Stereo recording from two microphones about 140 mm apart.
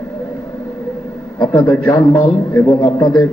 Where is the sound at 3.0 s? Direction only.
35° left (ahead or behind).